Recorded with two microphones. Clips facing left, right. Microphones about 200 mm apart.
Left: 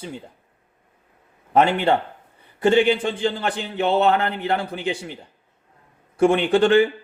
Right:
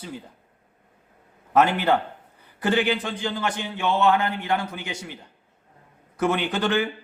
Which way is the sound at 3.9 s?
35° left (ahead or behind).